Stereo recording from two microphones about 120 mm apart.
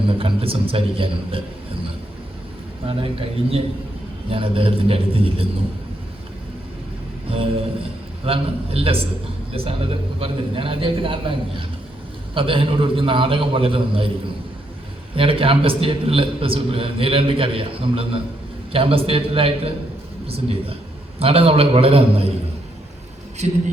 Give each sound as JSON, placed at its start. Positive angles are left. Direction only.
{"t": 0.1, "sound": "a man's voice", "side_deg": -50}
{"t": 2.8, "sound": "a man's voice", "side_deg": -50}
{"t": 8.2, "sound": "a man's voice", "side_deg": -55}
{"t": 15.1, "sound": "a man's voice", "side_deg": -50}
{"t": 23.4, "sound": "speech", "side_deg": -75}